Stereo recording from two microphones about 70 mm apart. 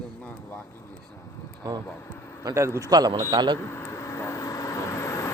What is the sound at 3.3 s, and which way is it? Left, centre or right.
Speech, right.